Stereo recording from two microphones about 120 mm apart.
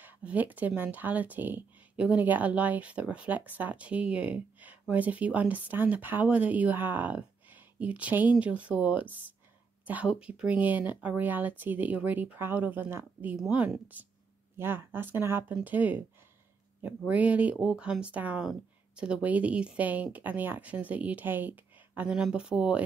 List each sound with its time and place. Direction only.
0.0 s speech: 15° right (ahead or behind)
17.1 s speech: 10° right (ahead or behind)